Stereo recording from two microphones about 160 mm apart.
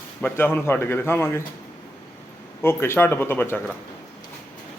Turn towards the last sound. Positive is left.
turn(degrees=10)  # may be behind; listen again after turning